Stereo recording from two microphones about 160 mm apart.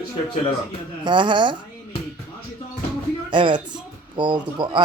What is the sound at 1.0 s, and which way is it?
Speech, 30° right (ahead or behind).